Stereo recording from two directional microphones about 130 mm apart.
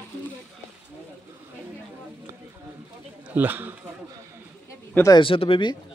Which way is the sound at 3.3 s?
15° right (ahead or behind).